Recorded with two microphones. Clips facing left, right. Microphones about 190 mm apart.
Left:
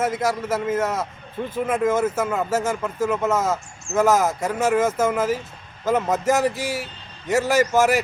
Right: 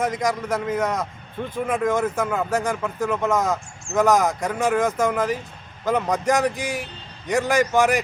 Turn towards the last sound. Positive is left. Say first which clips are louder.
# left 1 dB
turn(degrees=5)  # may be behind; listen again after turning